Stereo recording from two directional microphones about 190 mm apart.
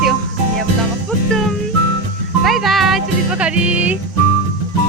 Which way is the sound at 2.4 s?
Centre (ahead or behind).